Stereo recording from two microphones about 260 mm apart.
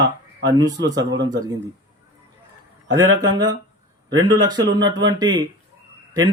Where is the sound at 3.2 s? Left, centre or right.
Centre.